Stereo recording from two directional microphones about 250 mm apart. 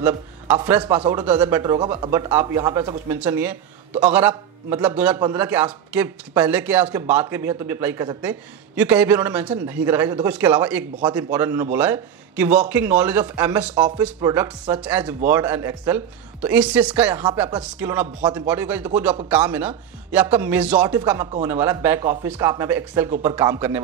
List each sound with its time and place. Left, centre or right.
0.8 s a man's voice: centre
3.1 s a man's voice: centre